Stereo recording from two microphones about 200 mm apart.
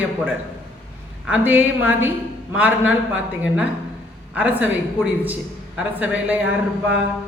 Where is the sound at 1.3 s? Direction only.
10° right (ahead or behind).